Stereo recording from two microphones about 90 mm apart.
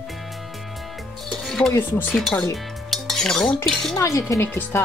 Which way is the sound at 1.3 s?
5° left (ahead or behind).